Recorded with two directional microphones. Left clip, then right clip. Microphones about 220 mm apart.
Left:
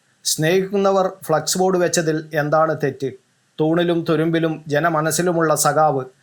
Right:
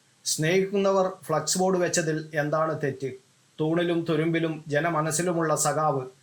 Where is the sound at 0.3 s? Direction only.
20° left (ahead or behind).